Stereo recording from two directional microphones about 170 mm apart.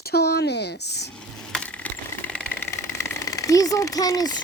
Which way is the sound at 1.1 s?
5° left (ahead or behind).